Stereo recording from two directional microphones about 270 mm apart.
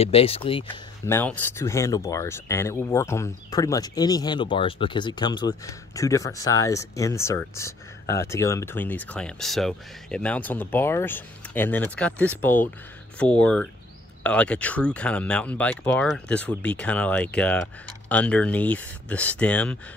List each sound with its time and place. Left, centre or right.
0.0 s speech: left
1.1 s speech: centre